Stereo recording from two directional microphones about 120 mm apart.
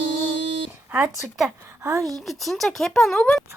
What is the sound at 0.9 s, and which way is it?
A woman's voice, 15° right (ahead or behind).